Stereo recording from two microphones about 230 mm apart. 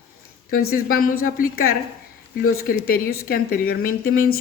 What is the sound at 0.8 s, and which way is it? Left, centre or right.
A woman's voice, left.